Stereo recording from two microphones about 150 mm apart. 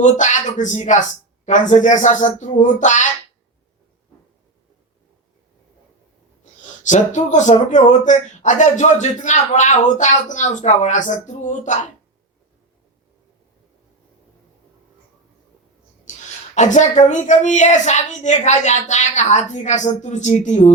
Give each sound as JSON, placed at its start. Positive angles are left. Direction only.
{"t": 0.0, "sound": "speech", "side_deg": 55}
{"t": 6.4, "sound": "speech", "side_deg": 55}
{"t": 16.1, "sound": "a sound", "side_deg": 55}
{"t": 16.6, "sound": "speech", "side_deg": 55}